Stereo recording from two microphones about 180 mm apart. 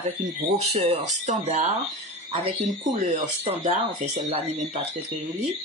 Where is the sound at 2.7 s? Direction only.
40° right (ahead or behind).